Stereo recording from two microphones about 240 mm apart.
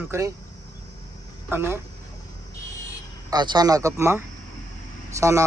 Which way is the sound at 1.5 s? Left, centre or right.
Centre.